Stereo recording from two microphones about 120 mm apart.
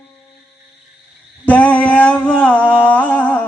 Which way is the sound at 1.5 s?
10° left (ahead or behind).